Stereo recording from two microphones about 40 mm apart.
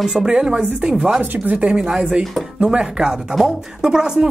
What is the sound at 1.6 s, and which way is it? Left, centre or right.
Speech, right.